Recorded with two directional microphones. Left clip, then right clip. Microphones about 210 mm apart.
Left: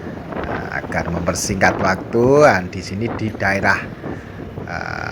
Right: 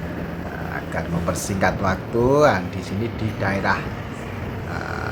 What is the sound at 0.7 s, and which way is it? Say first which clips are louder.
Speech: left 2 dB; 25° left (ahead or behind).